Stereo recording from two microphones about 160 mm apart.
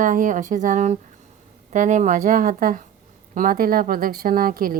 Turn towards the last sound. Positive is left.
turn(degrees=-65)  # may be behind; listen again after turning